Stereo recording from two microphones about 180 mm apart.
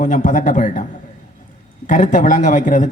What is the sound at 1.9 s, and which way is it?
A man's voice, 45° left (ahead or behind).